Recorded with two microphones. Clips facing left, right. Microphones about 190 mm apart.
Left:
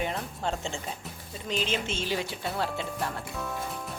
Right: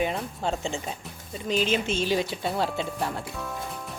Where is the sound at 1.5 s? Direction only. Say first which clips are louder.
Right 5 dB; 15° right (ahead or behind).